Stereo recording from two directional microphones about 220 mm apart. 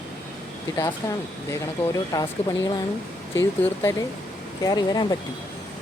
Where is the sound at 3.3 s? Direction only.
10° left (ahead or behind).